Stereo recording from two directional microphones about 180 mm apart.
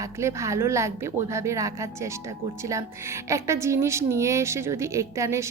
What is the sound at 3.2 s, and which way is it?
A woman's voice, 15° right (ahead or behind).